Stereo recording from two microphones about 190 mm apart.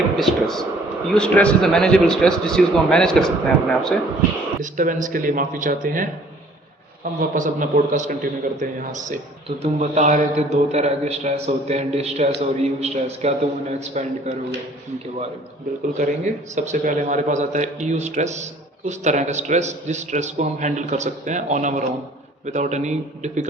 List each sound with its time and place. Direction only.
0.2 s a sound: centre (ahead or behind)
1.1 s a man's voice: 5° left (ahead or behind)
4.6 s a man's voice: 45° right (ahead or behind)
16.0 s a man's voice: 40° right (ahead or behind)